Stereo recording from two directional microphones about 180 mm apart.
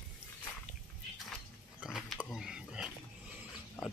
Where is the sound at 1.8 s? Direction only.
5° right (ahead or behind).